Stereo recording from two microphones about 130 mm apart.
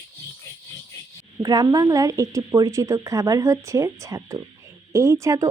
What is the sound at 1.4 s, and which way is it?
Speech, 30° right (ahead or behind).